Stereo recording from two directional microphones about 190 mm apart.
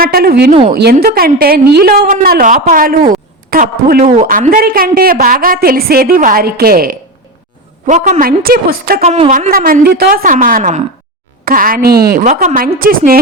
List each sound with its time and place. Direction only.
0.0 s a woman's voice: 50° right (ahead or behind)
7.9 s a woman's voice: 40° right (ahead or behind)
9.0 s speech: 35° right (ahead or behind)
9.5 s a woman's voice: 50° right (ahead or behind)
10.3 s a woman's voice: 40° right (ahead or behind)
12.2 s a woman's voice: 40° right (ahead or behind)